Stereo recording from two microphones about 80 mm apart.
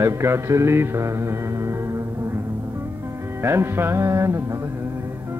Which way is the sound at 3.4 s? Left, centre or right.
Right.